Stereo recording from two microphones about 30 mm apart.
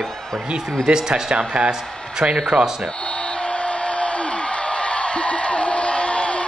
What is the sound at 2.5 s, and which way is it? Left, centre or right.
Speech, right.